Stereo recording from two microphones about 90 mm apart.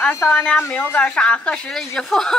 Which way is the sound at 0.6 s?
25° left (ahead or behind).